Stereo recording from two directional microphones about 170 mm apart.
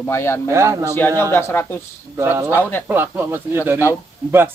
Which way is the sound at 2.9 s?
15° right (ahead or behind).